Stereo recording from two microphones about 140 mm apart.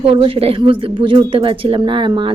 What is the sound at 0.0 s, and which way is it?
A woman's voice, 40° right (ahead or behind).